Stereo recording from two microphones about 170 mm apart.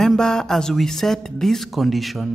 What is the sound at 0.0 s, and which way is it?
Speech, 5° left (ahead or behind).